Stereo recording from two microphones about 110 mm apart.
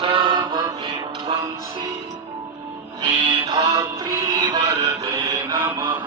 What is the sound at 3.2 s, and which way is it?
Music, 45° right (ahead or behind).